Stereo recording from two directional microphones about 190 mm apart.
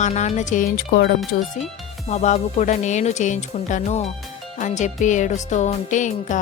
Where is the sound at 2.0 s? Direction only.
35° left (ahead or behind).